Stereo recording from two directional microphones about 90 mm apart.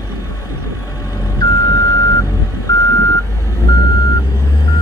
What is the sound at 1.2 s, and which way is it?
Reversing beeps, 45° left (ahead or behind).